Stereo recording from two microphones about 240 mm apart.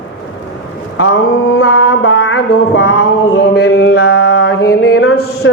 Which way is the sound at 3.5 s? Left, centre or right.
Left.